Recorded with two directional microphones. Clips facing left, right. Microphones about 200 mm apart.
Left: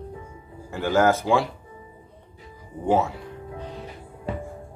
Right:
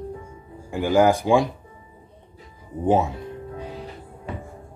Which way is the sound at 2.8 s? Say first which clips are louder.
Right 2 dB; 20° right (ahead or behind).